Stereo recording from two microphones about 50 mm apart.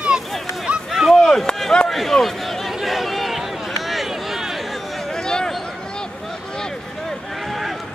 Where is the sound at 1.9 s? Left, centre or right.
Centre.